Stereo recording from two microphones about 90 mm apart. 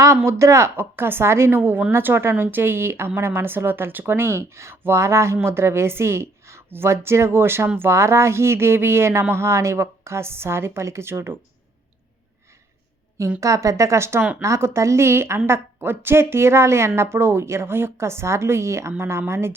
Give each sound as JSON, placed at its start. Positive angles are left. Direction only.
{"t": 0.3, "sound": "speech", "side_deg": -35}
{"t": 13.4, "sound": "a woman's voice", "side_deg": -35}